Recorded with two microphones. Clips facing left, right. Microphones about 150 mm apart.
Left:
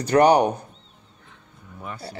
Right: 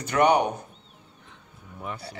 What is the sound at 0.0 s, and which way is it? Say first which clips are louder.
Speech: left 5 dB; 35° left (ahead or behind).